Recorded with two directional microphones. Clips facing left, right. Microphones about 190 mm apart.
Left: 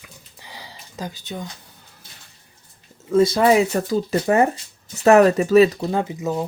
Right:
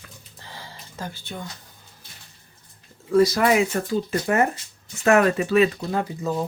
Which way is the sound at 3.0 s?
20° left (ahead or behind).